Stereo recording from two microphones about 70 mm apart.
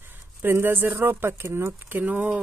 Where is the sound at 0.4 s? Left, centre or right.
Right.